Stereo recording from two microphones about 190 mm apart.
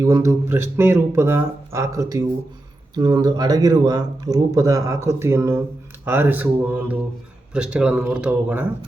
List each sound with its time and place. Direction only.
0.0 s speech: 15° right (ahead or behind)